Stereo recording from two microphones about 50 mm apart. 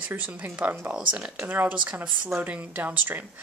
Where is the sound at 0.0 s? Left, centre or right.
Right.